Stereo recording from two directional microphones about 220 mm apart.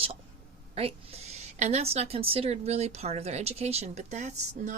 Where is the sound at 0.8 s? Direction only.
25° right (ahead or behind).